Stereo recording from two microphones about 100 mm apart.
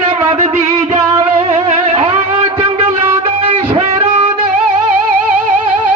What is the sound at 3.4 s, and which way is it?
Music, 80° right.